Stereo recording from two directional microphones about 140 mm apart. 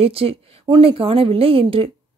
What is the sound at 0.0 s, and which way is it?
A woman's voice, 45° right (ahead or behind).